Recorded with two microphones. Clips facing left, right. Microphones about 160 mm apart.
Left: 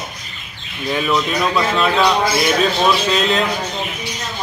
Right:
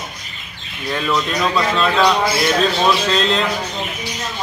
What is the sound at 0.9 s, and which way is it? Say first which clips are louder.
Speech: left 1 dB; 5° left (ahead or behind).